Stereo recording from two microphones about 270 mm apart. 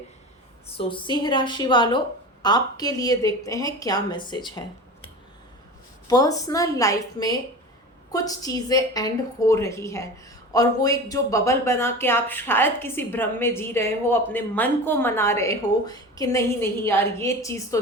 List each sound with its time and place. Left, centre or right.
0.7 s a woman's voice: centre
6.1 s speech: centre